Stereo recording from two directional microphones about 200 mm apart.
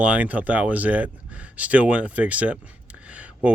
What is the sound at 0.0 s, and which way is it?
Speech, 5° right (ahead or behind).